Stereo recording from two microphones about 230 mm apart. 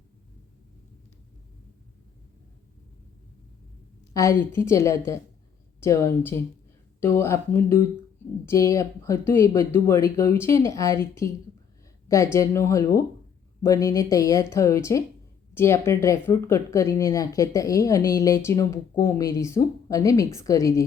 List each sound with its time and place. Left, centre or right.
4.1 s speech: centre